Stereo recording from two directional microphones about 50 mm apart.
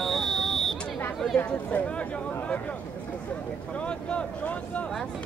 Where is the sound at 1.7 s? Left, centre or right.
Left.